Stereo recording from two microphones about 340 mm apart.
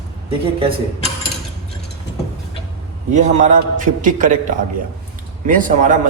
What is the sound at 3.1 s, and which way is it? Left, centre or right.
A man's voice, right.